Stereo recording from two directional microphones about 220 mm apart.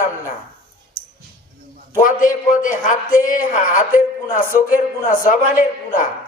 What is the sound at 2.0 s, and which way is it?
A man's voice, 35° left (ahead or behind).